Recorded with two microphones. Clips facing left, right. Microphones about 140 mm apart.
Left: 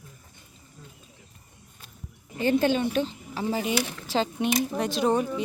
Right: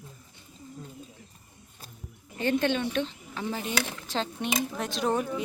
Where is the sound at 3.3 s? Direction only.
35° left (ahead or behind).